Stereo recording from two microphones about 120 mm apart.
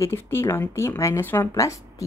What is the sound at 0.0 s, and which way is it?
A woman's voice, 20° left (ahead or behind).